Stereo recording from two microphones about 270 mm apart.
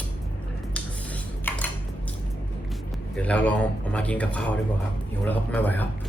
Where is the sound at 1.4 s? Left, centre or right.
Centre.